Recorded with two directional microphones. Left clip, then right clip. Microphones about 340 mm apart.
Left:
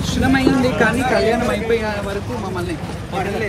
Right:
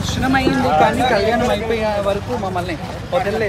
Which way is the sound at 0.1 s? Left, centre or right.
Centre.